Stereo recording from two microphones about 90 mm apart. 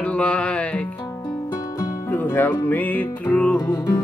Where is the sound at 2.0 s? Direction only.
25° left (ahead or behind).